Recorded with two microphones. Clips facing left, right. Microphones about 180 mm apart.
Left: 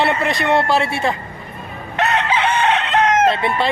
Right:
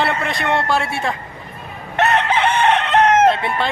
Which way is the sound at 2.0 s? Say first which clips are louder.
Right 2 dB; 55° right (ahead or behind).